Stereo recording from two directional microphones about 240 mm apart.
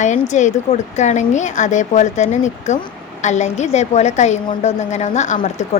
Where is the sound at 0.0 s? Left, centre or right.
Left.